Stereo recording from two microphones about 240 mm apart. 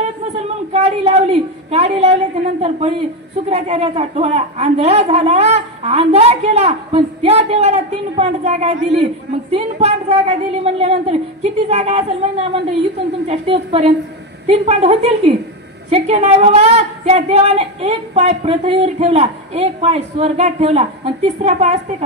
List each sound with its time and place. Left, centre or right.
0.7 s a woman's voice: right
3.4 s a woman's voice: right